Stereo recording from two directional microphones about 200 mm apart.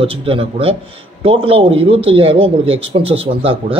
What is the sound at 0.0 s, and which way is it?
Speech, 25° right (ahead or behind).